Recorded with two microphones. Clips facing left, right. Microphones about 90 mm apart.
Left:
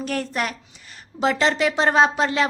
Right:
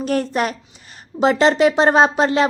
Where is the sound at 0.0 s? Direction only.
30° right (ahead or behind).